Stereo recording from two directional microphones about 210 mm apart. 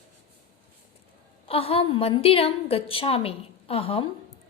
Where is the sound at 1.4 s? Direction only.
25° left (ahead or behind).